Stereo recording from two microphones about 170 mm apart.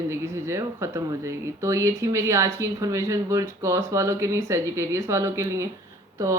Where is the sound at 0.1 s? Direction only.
15° right (ahead or behind).